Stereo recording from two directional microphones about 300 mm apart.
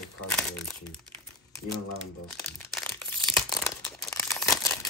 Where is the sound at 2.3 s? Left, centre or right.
Centre.